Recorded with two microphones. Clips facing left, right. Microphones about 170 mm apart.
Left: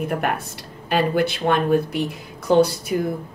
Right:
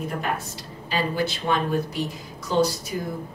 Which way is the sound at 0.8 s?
60° left (ahead or behind).